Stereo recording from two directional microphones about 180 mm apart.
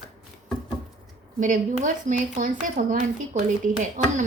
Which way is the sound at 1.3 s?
45° right (ahead or behind).